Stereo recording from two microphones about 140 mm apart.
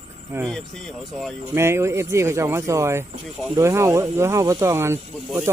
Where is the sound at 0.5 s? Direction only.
5° left (ahead or behind).